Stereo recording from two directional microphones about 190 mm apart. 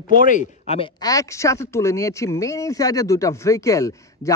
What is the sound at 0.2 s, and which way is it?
Speech, 40° left (ahead or behind).